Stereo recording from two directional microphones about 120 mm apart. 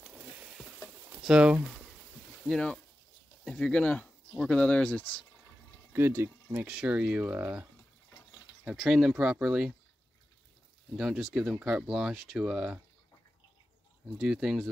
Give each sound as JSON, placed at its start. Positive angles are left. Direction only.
{"t": 1.2, "sound": "speech", "side_deg": -10}
{"t": 2.4, "sound": "speech", "side_deg": 5}
{"t": 5.9, "sound": "speech", "side_deg": -20}
{"t": 6.7, "sound": "speech", "side_deg": -5}
{"t": 8.6, "sound": "speech", "side_deg": -5}
{"t": 11.0, "sound": "speech", "side_deg": 0}
{"t": 14.1, "sound": "speech", "side_deg": -5}